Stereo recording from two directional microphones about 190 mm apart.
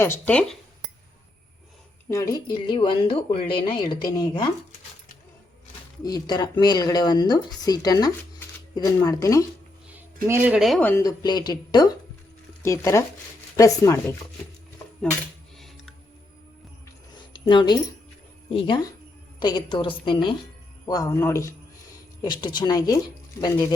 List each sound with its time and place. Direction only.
0.0 s speech: 10° left (ahead or behind)
2.0 s speech: 15° left (ahead or behind)
6.0 s speech: 20° left (ahead or behind)
10.2 s speech: 10° right (ahead or behind)
10.8 s speech: 15° left (ahead or behind)
15.5 s music: centre (ahead or behind)
17.4 s speech: 25° left (ahead or behind)